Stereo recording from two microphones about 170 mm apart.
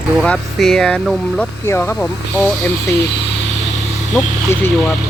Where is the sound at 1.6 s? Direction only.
15° left (ahead or behind).